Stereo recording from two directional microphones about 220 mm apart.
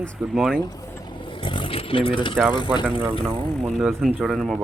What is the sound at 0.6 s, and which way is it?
Speech, 15° left (ahead or behind).